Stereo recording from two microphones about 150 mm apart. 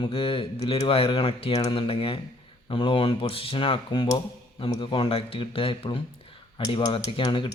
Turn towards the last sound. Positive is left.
turn(degrees=30)  # may be behind; listen again after turning